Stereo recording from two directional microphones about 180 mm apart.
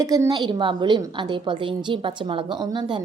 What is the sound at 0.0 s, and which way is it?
A woman's voice, 20° right (ahead or behind).